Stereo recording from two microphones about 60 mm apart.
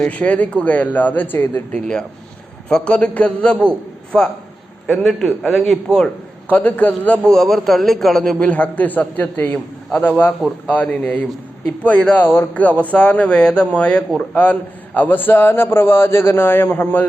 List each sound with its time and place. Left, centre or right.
0.1 s a man's voice: left
1.7 s a man's voice: centre
6.5 s a man's voice: left
7.3 s a man's voice: centre
8.4 s a man's voice: left
10.7 s a man's voice: left
12.1 s a man's voice: left
12.5 s a man's voice: left